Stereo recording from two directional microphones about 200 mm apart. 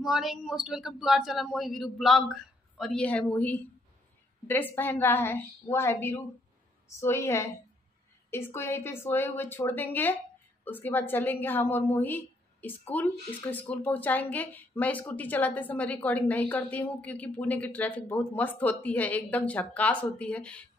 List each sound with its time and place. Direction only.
0.0 s a man's voice: centre (ahead or behind)